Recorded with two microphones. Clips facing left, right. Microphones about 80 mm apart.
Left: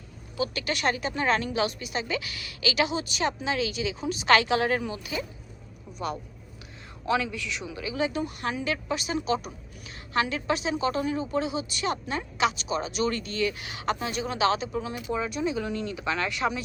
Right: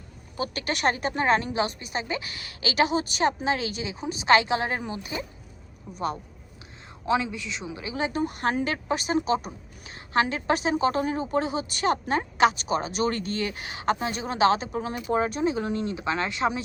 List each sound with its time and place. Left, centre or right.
0.3 s a woman's voice: right
4.0 s a woman's voice: right
7.0 s a woman's voice: right